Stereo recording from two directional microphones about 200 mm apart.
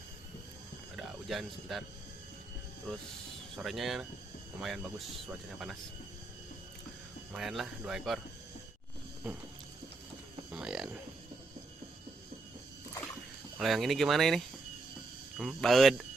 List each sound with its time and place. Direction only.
0.9 s speech: centre (ahead or behind)
2.9 s speech: 5° left (ahead or behind)
7.3 s speech: centre (ahead or behind)
9.2 s a sound: 5° right (ahead or behind)
10.5 s a sound: 5° right (ahead or behind)
13.6 s speech: centre (ahead or behind)